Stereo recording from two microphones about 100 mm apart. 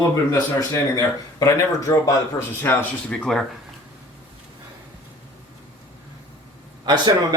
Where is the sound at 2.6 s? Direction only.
15° left (ahead or behind).